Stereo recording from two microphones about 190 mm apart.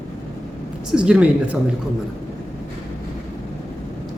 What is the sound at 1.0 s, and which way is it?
Speech, 5° right (ahead or behind).